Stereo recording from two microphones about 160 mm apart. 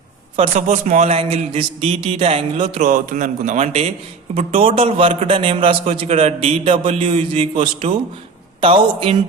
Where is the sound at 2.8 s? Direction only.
55° right (ahead or behind).